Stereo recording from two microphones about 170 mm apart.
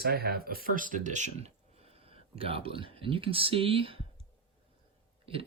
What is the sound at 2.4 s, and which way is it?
Speech, 35° right (ahead or behind).